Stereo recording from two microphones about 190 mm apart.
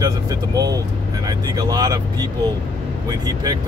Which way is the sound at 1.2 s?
20° right (ahead or behind).